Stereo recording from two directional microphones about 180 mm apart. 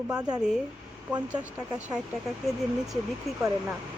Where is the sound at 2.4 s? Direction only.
Centre (ahead or behind).